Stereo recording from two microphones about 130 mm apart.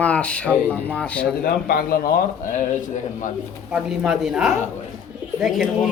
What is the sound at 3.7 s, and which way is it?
Speech, 5° right (ahead or behind).